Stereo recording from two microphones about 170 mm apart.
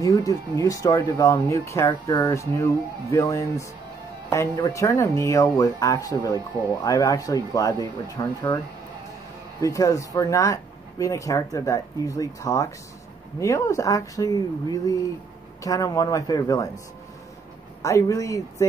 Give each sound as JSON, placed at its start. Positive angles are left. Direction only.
{"t": 0.0, "sound": "speech", "side_deg": 20}
{"t": 9.6, "sound": "speech", "side_deg": 20}
{"t": 17.8, "sound": "speech", "side_deg": 20}